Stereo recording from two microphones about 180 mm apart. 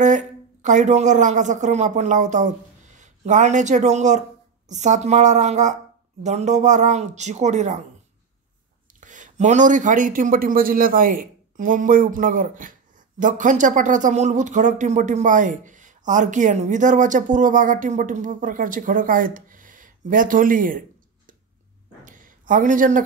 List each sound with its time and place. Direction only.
0.0 s speech: 45° right (ahead or behind)
9.0 s speech: 45° right (ahead or behind)
22.0 s a sound: 45° right (ahead or behind)